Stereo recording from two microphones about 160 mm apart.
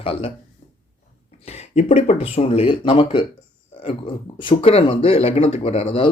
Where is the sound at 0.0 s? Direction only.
35° left (ahead or behind).